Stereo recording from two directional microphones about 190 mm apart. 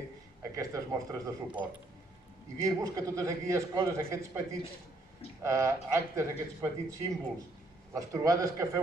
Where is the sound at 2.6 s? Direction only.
15° right (ahead or behind).